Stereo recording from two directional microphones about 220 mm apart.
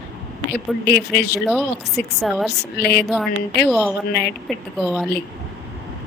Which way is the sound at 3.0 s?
5° left (ahead or behind).